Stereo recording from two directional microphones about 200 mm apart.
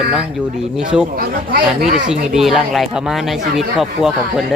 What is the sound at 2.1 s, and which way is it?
Speech, centre (ahead or behind).